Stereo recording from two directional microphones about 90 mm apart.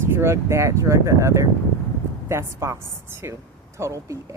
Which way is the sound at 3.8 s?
35° right (ahead or behind).